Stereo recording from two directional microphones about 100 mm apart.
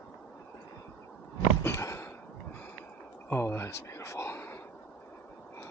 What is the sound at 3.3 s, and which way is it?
Speech, 25° left (ahead or behind).